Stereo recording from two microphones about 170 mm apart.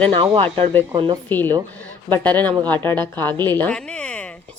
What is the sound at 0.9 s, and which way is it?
Speech, 30° right (ahead or behind).